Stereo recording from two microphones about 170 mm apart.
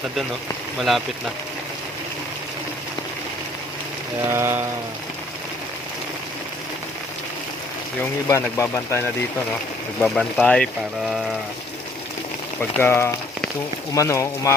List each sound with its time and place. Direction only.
0.8 s speech: centre (ahead or behind)
4.3 s a sound: 15° right (ahead or behind)
8.3 s speech: 15° left (ahead or behind)
10.0 s speech: 5° left (ahead or behind)
12.8 s speech: 15° left (ahead or behind)